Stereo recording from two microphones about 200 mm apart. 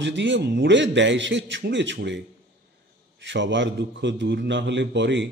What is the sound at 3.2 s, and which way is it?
Speech, 65° right (ahead or behind).